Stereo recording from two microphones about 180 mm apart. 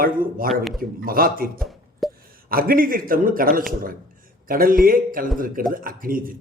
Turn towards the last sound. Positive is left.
turn(degrees=-50)  # may be behind; listen again after turning